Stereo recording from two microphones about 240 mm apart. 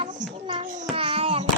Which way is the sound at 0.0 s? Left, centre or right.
Right.